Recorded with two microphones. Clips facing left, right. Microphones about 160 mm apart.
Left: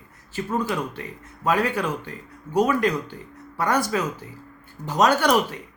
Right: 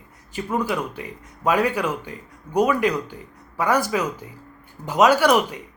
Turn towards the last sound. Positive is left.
turn(degrees=-10)  # may be behind; listen again after turning